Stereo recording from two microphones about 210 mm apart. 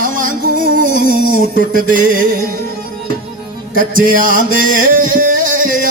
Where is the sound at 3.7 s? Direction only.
40° right (ahead or behind).